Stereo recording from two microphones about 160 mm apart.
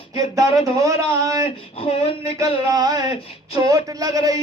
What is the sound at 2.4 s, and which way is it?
Speech, 25° right (ahead or behind).